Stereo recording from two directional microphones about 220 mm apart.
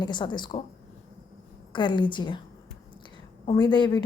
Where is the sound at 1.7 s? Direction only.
20° left (ahead or behind).